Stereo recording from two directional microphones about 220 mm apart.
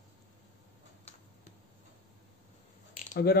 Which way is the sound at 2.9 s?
40° left (ahead or behind).